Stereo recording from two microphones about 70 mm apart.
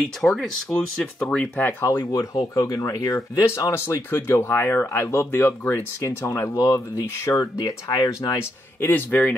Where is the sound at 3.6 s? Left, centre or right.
Left.